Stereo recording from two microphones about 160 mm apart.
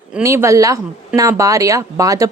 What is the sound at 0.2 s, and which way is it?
Speech, 20° right (ahead or behind).